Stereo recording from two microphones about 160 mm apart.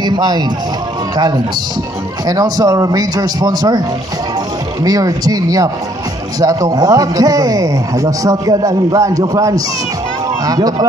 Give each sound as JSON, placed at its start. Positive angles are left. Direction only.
{"t": 0.0, "sound": "music", "side_deg": -25}
{"t": 1.1, "sound": "a man's voice", "side_deg": -25}
{"t": 4.8, "sound": "a man's voice", "side_deg": -20}